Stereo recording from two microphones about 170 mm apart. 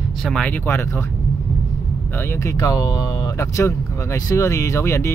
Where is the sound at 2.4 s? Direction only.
20° left (ahead or behind).